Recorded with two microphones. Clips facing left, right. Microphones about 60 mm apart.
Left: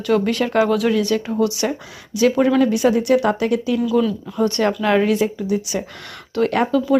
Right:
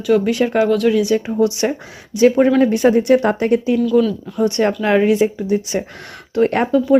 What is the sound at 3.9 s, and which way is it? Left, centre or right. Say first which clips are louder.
Speech: right 3 dB; centre.